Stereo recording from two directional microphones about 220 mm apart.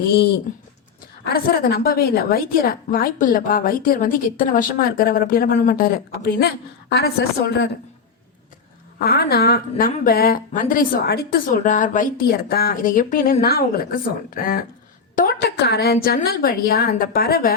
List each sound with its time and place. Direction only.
0.0 s a woman's voice: 45° left (ahead or behind)
9.0 s a woman's voice: 45° left (ahead or behind)